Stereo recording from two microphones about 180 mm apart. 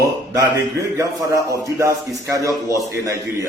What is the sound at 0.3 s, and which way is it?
A man's voice, 20° right (ahead or behind).